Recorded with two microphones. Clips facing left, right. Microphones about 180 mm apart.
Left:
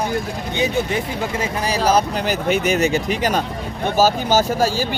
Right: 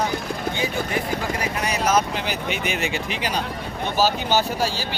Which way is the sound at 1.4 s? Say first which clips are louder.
Left 4 dB; 30° left (ahead or behind).